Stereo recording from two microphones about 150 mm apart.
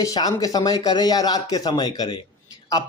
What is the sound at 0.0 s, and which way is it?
Speech, 25° left (ahead or behind).